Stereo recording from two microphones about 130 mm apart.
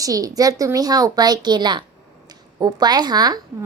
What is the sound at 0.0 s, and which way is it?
A woman's voice, 25° right (ahead or behind).